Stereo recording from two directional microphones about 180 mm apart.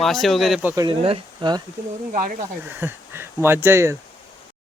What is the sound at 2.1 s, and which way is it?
Speech, 50° right (ahead or behind).